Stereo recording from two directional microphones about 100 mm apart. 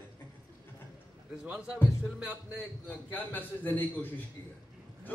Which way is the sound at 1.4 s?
10° right (ahead or behind).